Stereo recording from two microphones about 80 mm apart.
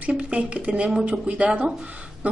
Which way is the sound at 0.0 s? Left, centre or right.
Centre.